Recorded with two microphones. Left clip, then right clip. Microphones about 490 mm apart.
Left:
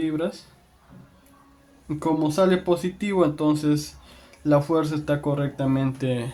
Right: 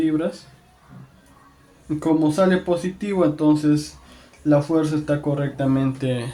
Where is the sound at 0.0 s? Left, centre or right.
Left.